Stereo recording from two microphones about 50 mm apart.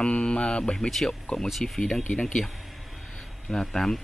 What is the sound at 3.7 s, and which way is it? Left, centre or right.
Speech, centre.